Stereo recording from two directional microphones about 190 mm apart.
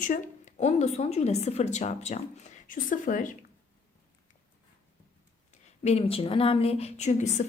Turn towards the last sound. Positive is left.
turn(degrees=35)  # may be behind; listen again after turning